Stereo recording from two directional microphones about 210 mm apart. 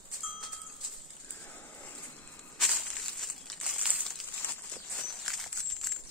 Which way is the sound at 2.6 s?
Centre (ahead or behind).